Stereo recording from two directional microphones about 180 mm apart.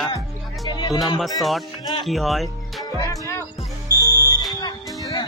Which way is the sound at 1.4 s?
Centre (ahead or behind).